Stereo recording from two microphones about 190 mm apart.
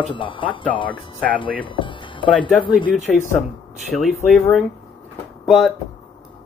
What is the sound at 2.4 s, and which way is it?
Speech, 25° left (ahead or behind).